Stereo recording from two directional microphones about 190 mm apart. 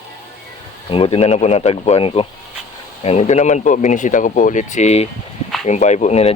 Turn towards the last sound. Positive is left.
turn(degrees=35)  # may be behind; listen again after turning